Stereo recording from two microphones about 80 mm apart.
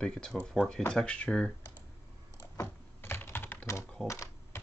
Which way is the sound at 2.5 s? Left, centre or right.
Left.